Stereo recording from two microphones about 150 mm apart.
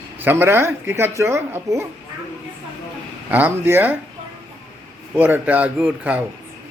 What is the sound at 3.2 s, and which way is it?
Speech, 10° right (ahead or behind).